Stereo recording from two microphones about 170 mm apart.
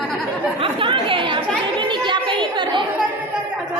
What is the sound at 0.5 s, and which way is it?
A child's voice, 30° right (ahead or behind).